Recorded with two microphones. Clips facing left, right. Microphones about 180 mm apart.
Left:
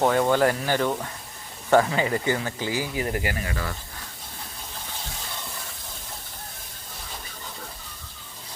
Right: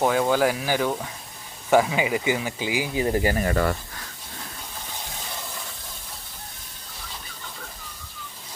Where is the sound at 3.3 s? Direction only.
45° right (ahead or behind).